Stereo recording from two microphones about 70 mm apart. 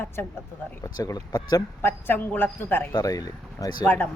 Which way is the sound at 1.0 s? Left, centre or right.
Left.